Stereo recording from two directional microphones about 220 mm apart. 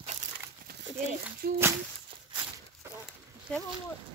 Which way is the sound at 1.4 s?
40° right (ahead or behind).